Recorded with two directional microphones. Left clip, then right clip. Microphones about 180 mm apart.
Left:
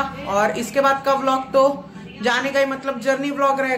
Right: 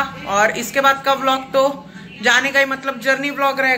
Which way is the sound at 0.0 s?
5° left (ahead or behind).